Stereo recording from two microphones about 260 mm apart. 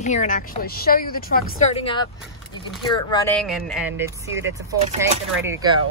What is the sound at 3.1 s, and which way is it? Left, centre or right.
Speech, centre.